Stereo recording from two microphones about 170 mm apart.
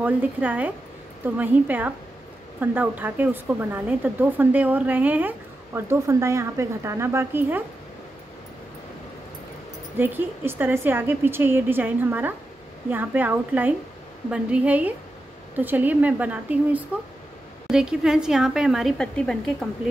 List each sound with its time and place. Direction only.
0.0 s a woman's voice: 10° right (ahead or behind)
9.9 s a woman's voice: 10° right (ahead or behind); by 19.7 s 5° left (ahead or behind)